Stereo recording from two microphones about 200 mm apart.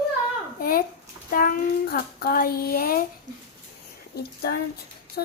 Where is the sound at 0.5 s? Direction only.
50° left (ahead or behind).